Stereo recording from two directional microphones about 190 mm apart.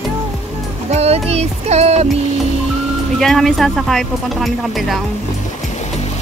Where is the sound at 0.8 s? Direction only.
35° right (ahead or behind).